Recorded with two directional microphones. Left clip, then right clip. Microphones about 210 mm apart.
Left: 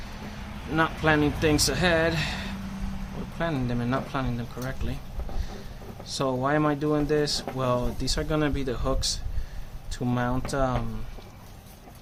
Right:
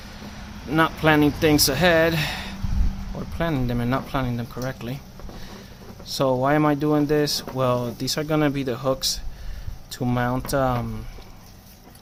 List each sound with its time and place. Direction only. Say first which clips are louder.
0.7 s speech: right 4 dB; 35° right (ahead or behind)
6.1 s speech: right 5 dB; 35° right (ahead or behind)